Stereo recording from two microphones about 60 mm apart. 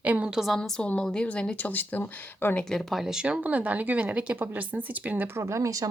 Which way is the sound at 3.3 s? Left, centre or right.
Right.